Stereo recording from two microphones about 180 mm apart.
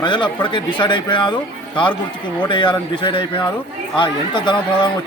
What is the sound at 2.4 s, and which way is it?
A man's voice, 25° left (ahead or behind).